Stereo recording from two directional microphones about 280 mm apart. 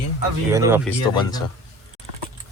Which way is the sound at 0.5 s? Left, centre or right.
Centre.